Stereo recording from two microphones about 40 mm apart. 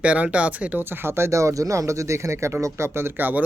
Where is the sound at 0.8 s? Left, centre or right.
Right.